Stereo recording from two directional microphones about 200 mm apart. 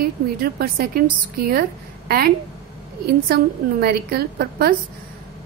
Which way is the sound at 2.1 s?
50° right (ahead or behind).